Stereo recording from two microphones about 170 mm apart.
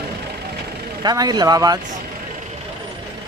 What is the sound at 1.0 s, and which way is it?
Speech, 25° right (ahead or behind).